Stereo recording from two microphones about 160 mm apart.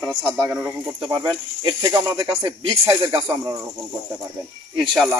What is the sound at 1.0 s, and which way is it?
Speech, 30° right (ahead or behind).